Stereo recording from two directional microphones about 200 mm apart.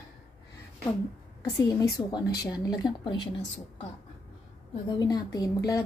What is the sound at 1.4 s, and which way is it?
A woman's voice, 15° left (ahead or behind).